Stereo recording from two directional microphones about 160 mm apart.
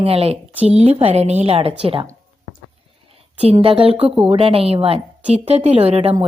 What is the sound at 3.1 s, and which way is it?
A woman's voice, 35° right (ahead or behind).